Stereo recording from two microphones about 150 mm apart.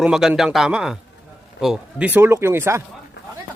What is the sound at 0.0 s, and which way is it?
A man's voice, 5° right (ahead or behind).